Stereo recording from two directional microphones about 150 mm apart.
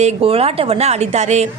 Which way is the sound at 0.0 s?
40° right (ahead or behind).